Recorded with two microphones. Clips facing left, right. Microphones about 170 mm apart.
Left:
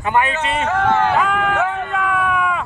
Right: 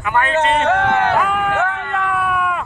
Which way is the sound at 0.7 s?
65° right (ahead or behind).